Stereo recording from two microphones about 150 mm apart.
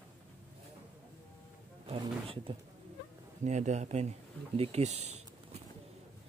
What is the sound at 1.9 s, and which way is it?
Speech, 35° right (ahead or behind).